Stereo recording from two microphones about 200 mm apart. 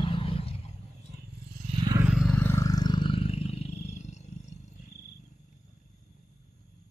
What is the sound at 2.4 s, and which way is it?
Roar, 15° left (ahead or behind).